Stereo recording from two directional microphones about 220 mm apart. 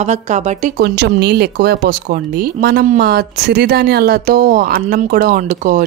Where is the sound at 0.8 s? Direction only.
50° right (ahead or behind).